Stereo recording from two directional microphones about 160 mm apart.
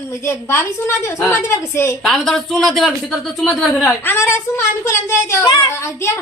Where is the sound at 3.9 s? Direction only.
15° left (ahead or behind).